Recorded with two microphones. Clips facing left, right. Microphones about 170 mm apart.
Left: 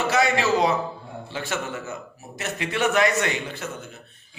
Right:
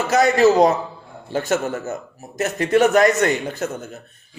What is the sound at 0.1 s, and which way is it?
Speech, 45° right (ahead or behind).